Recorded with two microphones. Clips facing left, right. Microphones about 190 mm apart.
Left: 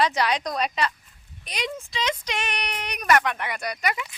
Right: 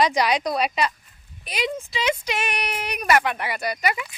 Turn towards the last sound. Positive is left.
turn(degrees=-5)  # may be behind; listen again after turning